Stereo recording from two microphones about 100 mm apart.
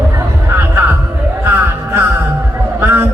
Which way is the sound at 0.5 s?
20° right (ahead or behind).